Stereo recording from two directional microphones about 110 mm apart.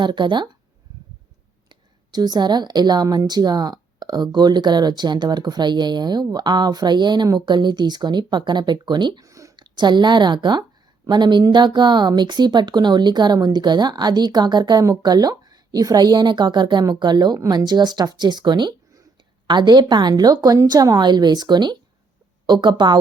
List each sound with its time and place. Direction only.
0.0 s speech: 45° right (ahead or behind)
1.7 s speech: 40° right (ahead or behind)
9.2 s a woman's voice: 30° right (ahead or behind)